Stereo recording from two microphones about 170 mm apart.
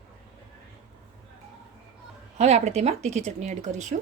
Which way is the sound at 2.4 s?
40° right (ahead or behind).